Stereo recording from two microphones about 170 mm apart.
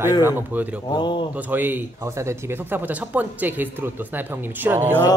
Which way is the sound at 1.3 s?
10° right (ahead or behind).